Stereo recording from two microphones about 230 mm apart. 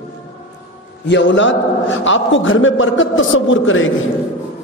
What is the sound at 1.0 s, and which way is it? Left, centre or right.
A man's voice, left.